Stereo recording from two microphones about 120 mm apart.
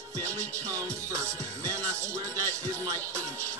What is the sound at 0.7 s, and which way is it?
Music, 25° right (ahead or behind).